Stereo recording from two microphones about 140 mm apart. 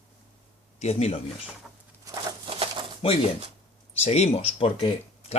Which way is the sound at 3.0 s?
40° left (ahead or behind).